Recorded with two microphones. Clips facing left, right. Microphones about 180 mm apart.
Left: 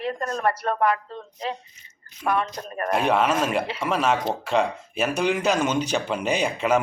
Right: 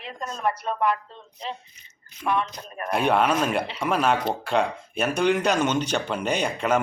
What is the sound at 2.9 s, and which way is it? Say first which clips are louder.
Speech: even; centre (ahead or behind).